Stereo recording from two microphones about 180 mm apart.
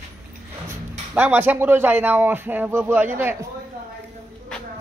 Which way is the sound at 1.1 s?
10° right (ahead or behind).